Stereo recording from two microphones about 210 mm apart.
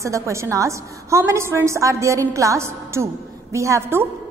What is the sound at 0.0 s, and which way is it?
A woman's voice, 15° right (ahead or behind).